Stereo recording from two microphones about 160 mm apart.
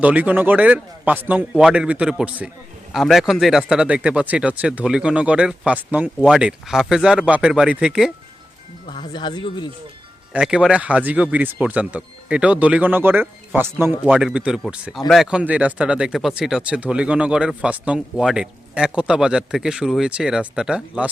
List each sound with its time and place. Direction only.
0.0 s a man's voice: 10° right (ahead or behind)
8.9 s speech: 30° left (ahead or behind)
10.3 s a man's voice: 5° right (ahead or behind)